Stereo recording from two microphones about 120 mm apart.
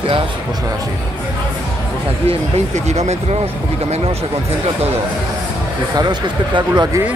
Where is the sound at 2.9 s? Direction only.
65° right (ahead or behind).